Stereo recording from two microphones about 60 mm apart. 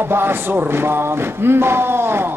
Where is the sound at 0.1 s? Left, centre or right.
Right.